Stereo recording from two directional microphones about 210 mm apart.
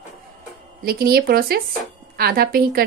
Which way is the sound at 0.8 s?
45° right (ahead or behind).